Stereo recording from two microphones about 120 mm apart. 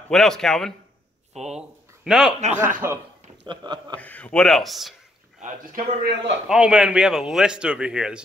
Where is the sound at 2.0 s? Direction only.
Centre (ahead or behind).